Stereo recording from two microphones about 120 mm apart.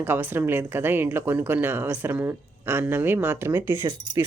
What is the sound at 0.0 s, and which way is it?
Speech, 15° right (ahead or behind).